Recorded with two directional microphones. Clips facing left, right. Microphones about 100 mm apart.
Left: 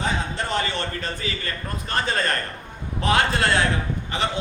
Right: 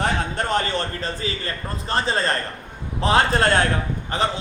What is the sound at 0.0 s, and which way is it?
A man's voice, 50° right (ahead or behind).